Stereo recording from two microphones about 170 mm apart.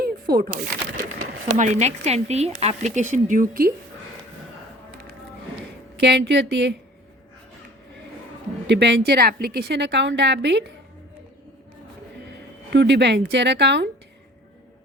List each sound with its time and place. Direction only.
0.0 s a sound: 60° right (ahead or behind)
1.5 s speech: 45° right (ahead or behind)
6.0 s a woman's voice: 85° right
8.6 s a woman's voice: 90° right
12.7 s speech: 90° right